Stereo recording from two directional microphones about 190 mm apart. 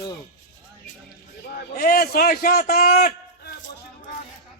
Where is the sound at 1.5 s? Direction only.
50° left (ahead or behind).